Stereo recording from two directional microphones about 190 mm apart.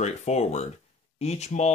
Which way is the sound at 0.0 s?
35° left (ahead or behind).